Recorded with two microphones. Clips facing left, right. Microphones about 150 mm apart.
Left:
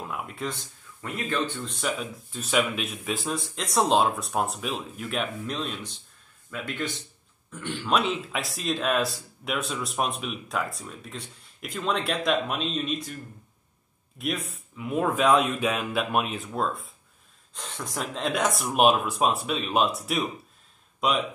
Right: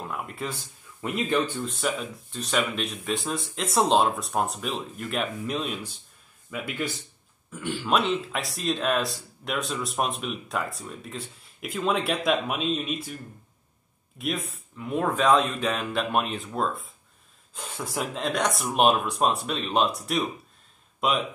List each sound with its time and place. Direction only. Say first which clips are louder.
0.0 s speech: even; centre (ahead or behind)
14.1 s speech: even; centre (ahead or behind)